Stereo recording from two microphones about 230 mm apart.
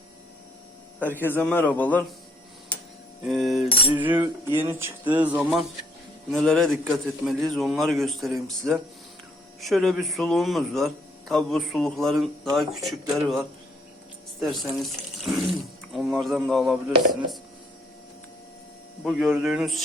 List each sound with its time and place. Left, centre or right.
0.9 s a man's voice: centre
3.2 s speech: centre
4.0 s music: centre
6.3 s speech: centre
14.4 s speech: centre
15.9 s speech: centre
19.0 s speech: centre